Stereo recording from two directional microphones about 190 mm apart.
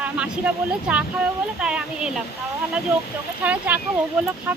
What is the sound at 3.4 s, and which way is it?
Speech, 10° right (ahead or behind).